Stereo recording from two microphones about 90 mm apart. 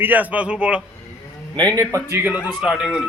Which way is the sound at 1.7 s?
30° right (ahead or behind).